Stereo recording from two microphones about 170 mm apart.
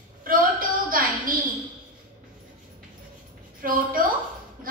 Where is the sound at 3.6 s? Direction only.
55° right (ahead or behind).